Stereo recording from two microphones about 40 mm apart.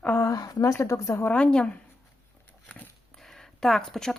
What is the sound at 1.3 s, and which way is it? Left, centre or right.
Speech, left.